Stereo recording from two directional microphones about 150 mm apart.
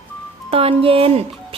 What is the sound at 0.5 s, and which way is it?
Speech, 40° right (ahead or behind).